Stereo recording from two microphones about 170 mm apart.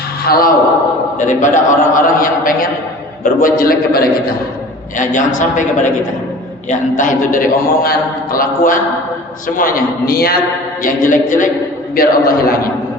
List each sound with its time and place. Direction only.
0.3 s a man's voice: 60° left (ahead or behind)
1.2 s a man's voice: 45° left (ahead or behind)
4.9 s a man's voice: 50° left (ahead or behind)
10.8 s a man's voice: 50° left (ahead or behind)